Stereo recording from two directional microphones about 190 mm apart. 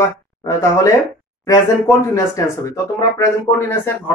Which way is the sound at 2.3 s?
15° left (ahead or behind).